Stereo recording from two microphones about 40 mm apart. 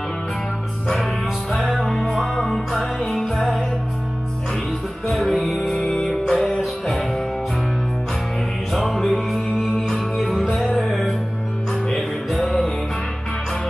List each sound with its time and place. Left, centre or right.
1.9 s music: centre
5.0 s music: centre
5.6 s music: centre
8.7 s music: centre
10.3 s music: centre
10.8 s music: centre
12.4 s music: centre